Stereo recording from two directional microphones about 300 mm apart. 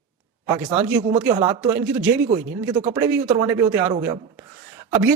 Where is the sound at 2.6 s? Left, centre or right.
Centre.